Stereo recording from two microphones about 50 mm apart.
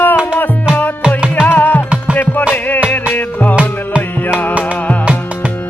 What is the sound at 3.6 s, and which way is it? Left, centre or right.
Music, right.